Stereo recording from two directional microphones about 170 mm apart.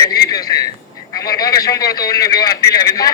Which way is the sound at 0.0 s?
20° left (ahead or behind).